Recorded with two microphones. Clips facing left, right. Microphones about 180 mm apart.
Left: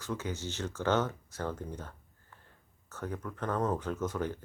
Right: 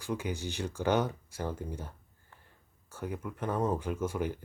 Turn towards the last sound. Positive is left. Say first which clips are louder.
# right 1 dB
turn(degrees=-10)  # may be behind; listen again after turning